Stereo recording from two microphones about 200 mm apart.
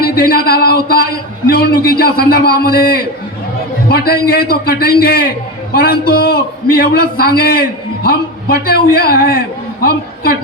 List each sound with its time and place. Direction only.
0.0 s a man's voice: 50° left (ahead or behind)